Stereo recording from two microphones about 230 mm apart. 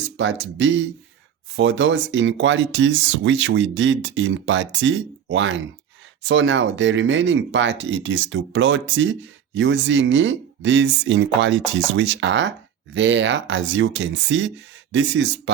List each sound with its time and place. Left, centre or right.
0.2 s speech: right